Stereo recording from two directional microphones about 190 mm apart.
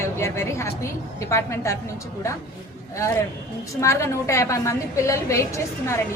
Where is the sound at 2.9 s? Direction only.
15° left (ahead or behind).